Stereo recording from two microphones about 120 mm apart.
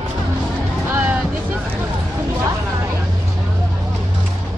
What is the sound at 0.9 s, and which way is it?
Music, 15° right (ahead or behind).